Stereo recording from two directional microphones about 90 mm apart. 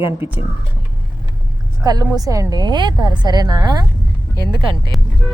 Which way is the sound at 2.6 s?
55° right (ahead or behind).